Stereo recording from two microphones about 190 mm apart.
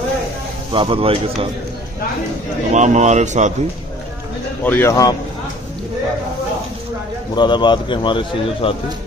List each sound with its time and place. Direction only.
0.7 s speech: 30° right (ahead or behind)
2.7 s a man's voice: 40° right (ahead or behind)
4.6 s speech: 10° left (ahead or behind)
7.3 s speech: 25° left (ahead or behind)